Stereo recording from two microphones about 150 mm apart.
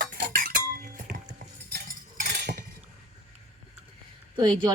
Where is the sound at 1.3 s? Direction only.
70° right (ahead or behind).